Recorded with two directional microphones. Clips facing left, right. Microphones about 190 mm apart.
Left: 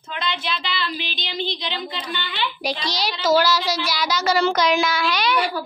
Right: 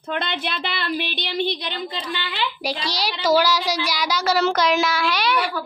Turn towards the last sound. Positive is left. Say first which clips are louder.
# even
turn(degrees=-5)  # may be behind; listen again after turning